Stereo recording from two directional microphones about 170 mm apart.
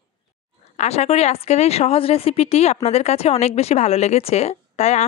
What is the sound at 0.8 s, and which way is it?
A woman's voice, 40° left (ahead or behind).